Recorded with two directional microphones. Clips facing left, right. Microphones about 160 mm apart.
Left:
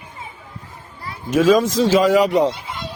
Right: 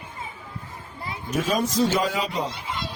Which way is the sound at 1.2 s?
90° left.